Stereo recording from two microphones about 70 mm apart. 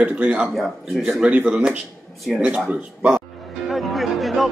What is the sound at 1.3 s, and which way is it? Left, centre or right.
Speech, centre.